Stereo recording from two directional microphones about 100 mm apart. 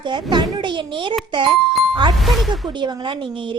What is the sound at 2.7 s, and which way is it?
Speech, 50° right (ahead or behind).